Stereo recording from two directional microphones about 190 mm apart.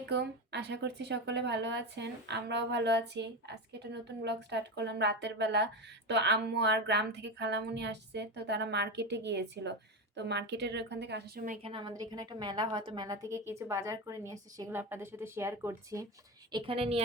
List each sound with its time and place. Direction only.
0.0 s a woman's voice: 65° right (ahead or behind)
11.6 s a woman's voice: 25° right (ahead or behind)
16.5 s a woman's voice: 25° right (ahead or behind)